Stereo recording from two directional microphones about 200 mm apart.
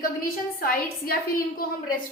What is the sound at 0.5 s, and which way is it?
A woman's voice, 50° left (ahead or behind).